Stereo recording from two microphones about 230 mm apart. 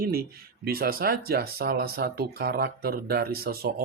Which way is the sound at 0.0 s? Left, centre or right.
Right.